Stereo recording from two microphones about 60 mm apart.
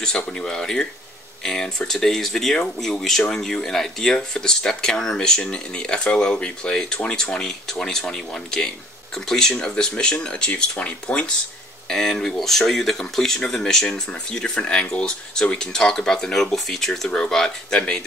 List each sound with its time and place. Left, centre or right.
0.0 s speech: centre
11.9 s speech: centre